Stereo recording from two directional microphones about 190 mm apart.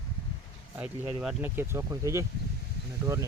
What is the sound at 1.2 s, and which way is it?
Speech, 5° right (ahead or behind).